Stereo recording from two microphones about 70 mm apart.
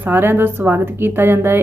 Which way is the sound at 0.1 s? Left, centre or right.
Right.